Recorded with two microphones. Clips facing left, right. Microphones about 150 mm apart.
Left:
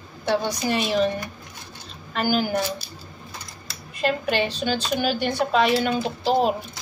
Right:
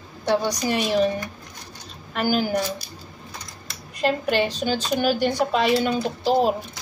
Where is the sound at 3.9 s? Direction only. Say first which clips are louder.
Right 2 dB; 40° right (ahead or behind).